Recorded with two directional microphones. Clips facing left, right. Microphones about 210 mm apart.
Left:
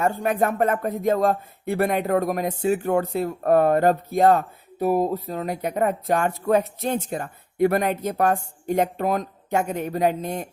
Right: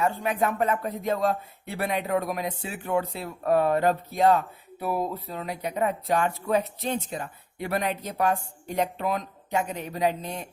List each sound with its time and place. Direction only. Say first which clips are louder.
0.0 s speech: left 4 dB; 50° left (ahead or behind)